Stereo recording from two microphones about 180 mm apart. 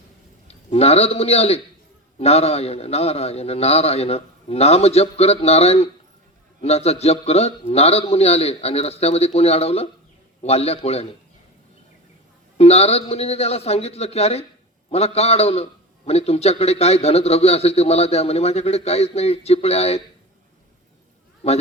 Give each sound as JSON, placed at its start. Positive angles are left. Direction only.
{"t": 0.4, "sound": "a man's voice", "side_deg": 35}
{"t": 12.5, "sound": "a man's voice", "side_deg": 35}
{"t": 21.4, "sound": "a man's voice", "side_deg": 35}